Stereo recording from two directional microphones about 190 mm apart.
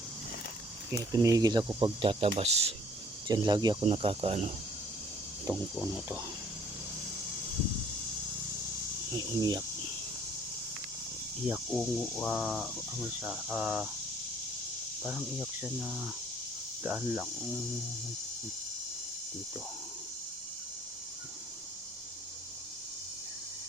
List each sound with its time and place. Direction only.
0.9 s speech: 20° right (ahead or behind); by 2.7 s 35° right (ahead or behind)
3.2 s speech: 20° right (ahead or behind)
5.5 s insect: 10° right (ahead or behind)
9.1 s speech: 20° right (ahead or behind)
11.4 s speech: 5° right (ahead or behind)
15.0 s speech: 5° right (ahead or behind)
16.8 s insect: 10° right (ahead or behind)